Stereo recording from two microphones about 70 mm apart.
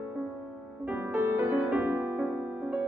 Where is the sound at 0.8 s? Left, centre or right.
Right.